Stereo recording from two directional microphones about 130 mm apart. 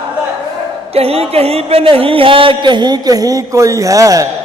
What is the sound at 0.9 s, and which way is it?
Speech, 50° right (ahead or behind).